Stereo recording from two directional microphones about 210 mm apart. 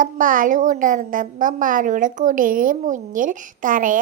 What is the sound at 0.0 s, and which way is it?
A woman's voice, 40° right (ahead or behind).